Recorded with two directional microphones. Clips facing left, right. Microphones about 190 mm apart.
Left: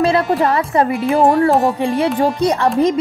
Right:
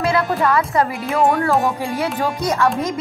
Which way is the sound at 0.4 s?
30° left (ahead or behind).